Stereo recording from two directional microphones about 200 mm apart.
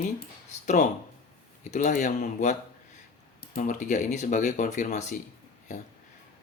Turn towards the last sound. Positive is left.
turn(degrees=35)  # may be behind; listen again after turning